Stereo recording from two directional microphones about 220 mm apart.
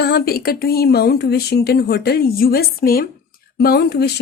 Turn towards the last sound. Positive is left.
turn(degrees=45)  # may be behind; listen again after turning